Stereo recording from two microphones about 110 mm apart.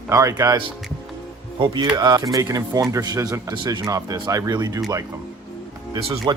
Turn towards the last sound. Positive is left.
turn(degrees=-45)  # may be behind; listen again after turning